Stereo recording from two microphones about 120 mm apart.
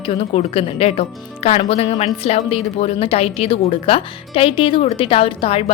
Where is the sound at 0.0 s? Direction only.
55° left (ahead or behind).